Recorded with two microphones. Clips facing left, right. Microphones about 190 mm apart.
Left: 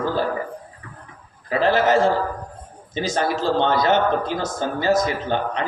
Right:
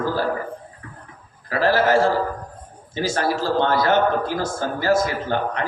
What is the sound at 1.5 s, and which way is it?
A man's voice, 20° left (ahead or behind).